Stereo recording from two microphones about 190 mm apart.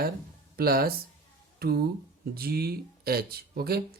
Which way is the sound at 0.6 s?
55° right (ahead or behind).